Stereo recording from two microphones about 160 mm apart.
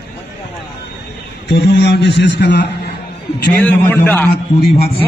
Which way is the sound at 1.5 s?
90° left.